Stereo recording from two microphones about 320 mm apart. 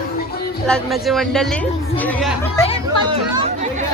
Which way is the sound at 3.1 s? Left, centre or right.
Centre.